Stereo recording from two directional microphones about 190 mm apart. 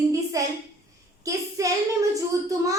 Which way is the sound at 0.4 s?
15° right (ahead or behind).